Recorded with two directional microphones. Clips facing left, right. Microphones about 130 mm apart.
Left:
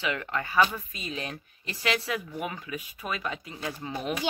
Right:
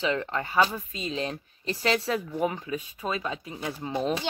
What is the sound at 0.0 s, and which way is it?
Speech, 30° right (ahead or behind).